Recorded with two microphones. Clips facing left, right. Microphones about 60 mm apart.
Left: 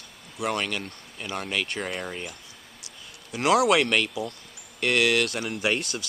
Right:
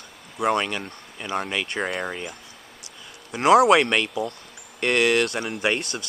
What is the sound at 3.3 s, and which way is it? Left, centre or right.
Speech, right.